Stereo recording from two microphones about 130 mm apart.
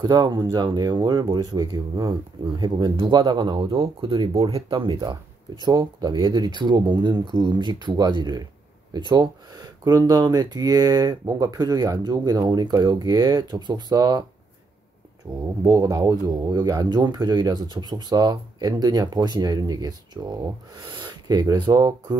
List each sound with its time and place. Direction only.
0.0 s speech: 35° right (ahead or behind)
15.2 s speech: 25° right (ahead or behind)